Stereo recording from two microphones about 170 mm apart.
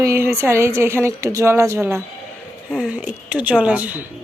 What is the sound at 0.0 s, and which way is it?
A woman's voice, 15° right (ahead or behind).